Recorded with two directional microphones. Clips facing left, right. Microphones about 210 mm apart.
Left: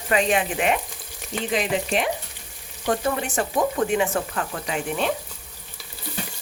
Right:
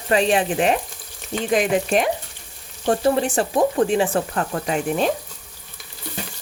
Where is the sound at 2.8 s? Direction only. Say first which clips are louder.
Right 5 dB; 35° right (ahead or behind).